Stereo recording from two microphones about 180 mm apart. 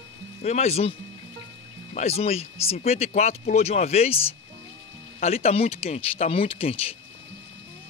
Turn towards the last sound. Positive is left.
turn(degrees=30)  # may be behind; listen again after turning